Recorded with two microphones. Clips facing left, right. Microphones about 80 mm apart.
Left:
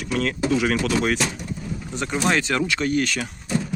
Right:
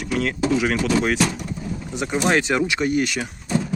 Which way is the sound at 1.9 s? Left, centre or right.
Centre.